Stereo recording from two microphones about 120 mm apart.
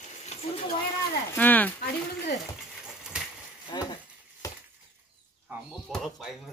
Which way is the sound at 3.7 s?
35° left (ahead or behind).